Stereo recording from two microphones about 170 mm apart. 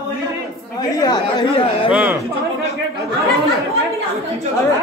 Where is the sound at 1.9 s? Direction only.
10° right (ahead or behind).